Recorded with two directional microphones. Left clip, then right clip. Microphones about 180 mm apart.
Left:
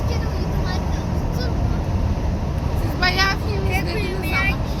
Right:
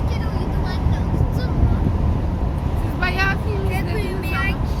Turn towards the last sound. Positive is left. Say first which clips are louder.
# left 2 dB
turn(degrees=35)  # may be behind; listen again after turning